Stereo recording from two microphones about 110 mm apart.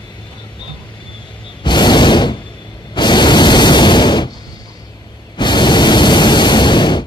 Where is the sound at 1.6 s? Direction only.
45° left (ahead or behind).